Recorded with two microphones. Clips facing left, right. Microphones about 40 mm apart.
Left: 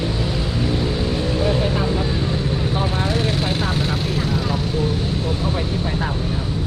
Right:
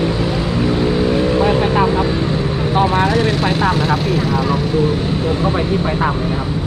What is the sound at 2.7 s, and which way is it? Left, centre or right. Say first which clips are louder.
Speech: right 12 dB; right.